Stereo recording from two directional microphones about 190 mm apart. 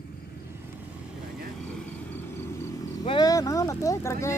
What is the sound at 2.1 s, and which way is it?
Vehicle, 15° left (ahead or behind).